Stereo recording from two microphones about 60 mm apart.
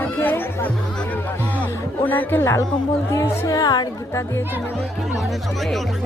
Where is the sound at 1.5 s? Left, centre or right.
Left.